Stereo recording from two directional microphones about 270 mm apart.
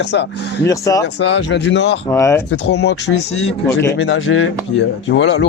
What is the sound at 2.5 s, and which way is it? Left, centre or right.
A man's voice, left.